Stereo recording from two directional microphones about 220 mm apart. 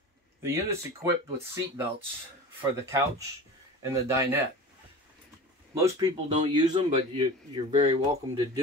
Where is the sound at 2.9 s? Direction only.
15° right (ahead or behind).